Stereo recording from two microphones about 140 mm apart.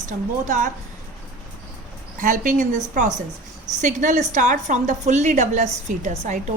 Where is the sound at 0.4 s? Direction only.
65° right (ahead or behind).